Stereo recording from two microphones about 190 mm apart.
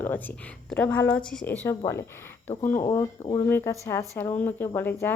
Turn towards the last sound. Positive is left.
turn(degrees=10)  # may be behind; listen again after turning